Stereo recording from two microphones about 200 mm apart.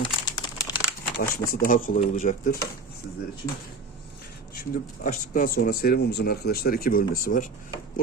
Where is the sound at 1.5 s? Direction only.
45° left (ahead or behind).